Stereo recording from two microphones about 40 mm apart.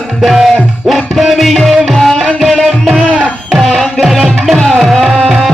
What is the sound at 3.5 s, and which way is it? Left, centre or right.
Music, centre.